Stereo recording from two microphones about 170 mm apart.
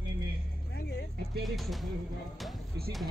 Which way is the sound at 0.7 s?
75° left (ahead or behind).